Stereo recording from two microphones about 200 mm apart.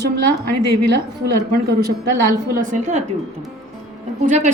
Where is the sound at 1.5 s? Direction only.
50° right (ahead or behind).